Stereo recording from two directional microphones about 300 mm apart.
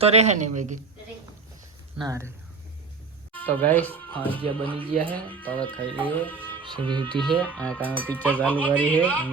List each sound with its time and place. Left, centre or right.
0.0 s speech: right
2.0 s speech: centre
3.4 s speech: centre
4.4 s speech: centre
5.4 s speech: centre
6.8 s speech: centre
7.1 s speech: centre
8.5 s speech: centre
8.8 s speech: centre